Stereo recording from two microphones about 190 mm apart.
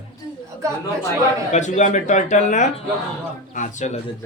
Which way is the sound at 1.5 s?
40° left (ahead or behind).